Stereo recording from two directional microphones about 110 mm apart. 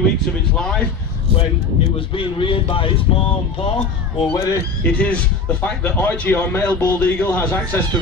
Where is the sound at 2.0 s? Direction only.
50° left (ahead or behind).